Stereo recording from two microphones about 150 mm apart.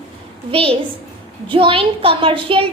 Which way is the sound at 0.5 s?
35° right (ahead or behind).